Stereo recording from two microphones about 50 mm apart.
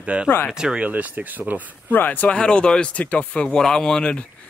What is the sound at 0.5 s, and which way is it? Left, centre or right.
Speech, centre.